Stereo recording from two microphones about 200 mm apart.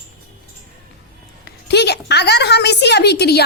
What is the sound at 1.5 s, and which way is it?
A woman's voice, 55° left (ahead or behind).